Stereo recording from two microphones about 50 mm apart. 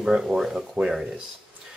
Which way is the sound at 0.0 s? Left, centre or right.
Centre.